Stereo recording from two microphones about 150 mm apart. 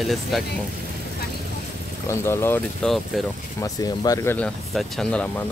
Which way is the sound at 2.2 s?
15° left (ahead or behind).